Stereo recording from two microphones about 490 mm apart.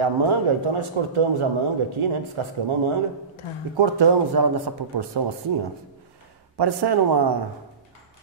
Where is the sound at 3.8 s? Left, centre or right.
Right.